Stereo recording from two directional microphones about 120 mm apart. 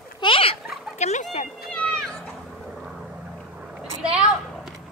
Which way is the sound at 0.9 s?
70° left (ahead or behind).